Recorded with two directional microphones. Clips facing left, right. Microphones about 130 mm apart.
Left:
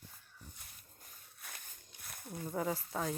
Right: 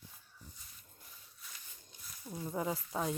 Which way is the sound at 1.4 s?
55° left (ahead or behind).